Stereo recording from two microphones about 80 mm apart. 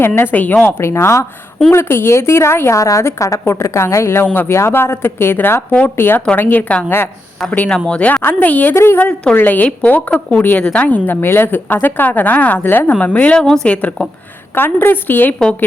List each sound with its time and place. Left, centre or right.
0.2 s a woman's voice: left
0.8 s a woman's voice: left
6.8 s a woman's voice: left
7.9 s a woman's voice: centre; by 9.0 s left
9.0 s a woman's voice: centre
14.5 s a woman's voice: left